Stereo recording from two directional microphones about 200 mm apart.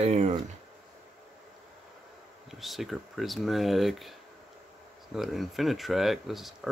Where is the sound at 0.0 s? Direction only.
35° right (ahead or behind).